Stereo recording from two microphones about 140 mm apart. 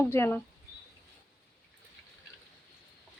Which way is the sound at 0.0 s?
15° left (ahead or behind).